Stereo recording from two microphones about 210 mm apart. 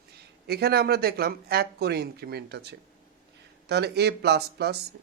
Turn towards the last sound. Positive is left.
turn(degrees=-50)  # may be behind; listen again after turning